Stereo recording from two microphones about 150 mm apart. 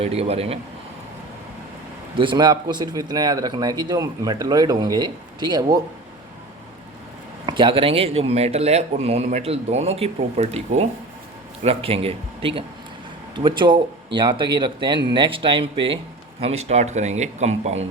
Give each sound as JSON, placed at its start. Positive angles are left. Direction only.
{"t": 0.0, "sound": "speech", "side_deg": -45}
{"t": 2.1, "sound": "speech", "side_deg": -30}
{"t": 7.4, "sound": "a man's voice", "side_deg": -35}